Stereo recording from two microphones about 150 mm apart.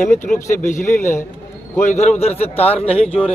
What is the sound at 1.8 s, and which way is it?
A man's voice, 50° left (ahead or behind).